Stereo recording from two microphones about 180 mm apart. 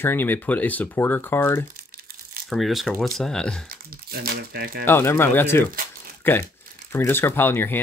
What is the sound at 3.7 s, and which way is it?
Speech, 55° right (ahead or behind).